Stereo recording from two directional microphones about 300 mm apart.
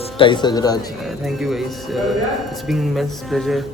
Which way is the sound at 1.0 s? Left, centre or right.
Centre.